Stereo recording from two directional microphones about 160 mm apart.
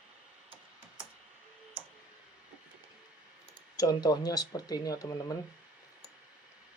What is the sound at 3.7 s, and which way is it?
Speech, 25° left (ahead or behind).